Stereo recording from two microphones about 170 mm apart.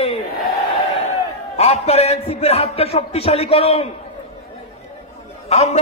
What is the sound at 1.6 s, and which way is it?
A man's voice, 40° left (ahead or behind).